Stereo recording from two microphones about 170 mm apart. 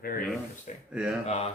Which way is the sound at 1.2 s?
40° left (ahead or behind).